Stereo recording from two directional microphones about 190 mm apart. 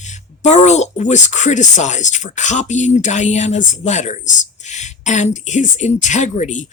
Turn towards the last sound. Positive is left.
turn(degrees=40)  # may be behind; listen again after turning